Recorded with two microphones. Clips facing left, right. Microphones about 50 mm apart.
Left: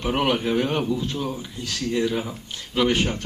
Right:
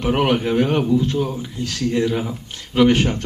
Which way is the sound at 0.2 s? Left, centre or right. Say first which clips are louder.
Right 3 dB; right.